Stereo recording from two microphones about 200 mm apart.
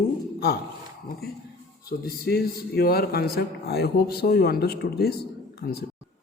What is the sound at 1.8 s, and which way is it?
A man's voice, 50° left (ahead or behind).